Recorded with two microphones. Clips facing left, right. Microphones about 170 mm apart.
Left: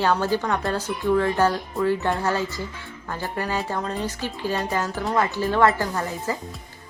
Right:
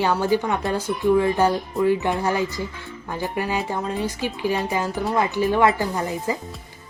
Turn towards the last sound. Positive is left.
turn(degrees=-15)  # may be behind; listen again after turning